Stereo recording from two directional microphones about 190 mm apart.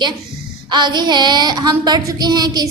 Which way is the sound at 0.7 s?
25° right (ahead or behind).